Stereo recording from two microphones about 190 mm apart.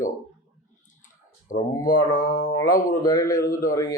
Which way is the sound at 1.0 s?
45° left (ahead or behind).